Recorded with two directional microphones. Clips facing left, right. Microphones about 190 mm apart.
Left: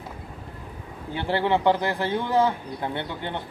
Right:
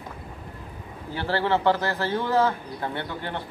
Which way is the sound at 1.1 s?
15° left (ahead or behind).